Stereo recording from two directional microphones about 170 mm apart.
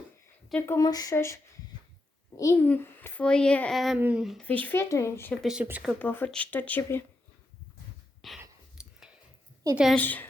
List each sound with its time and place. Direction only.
0.6 s a child's voice: 20° left (ahead or behind); by 4.4 s centre (ahead or behind)
4.4 s a child's voice: 10° left (ahead or behind)
5.4 s speech: 5° right (ahead or behind)
6.0 s a child's voice: 10° left (ahead or behind)
8.2 s a sound: centre (ahead or behind)
9.7 s speech: centre (ahead or behind)
10.0 s a child's voice: 10° left (ahead or behind)